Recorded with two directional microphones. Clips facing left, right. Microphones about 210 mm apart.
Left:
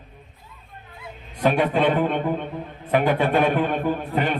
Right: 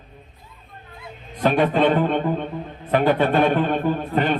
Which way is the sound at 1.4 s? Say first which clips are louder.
Right 2 dB; 10° left (ahead or behind).